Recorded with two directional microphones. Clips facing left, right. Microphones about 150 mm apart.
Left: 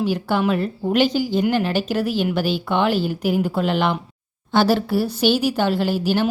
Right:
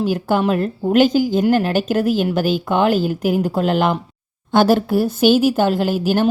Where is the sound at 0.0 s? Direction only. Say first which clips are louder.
Right 3 dB; 45° right (ahead or behind).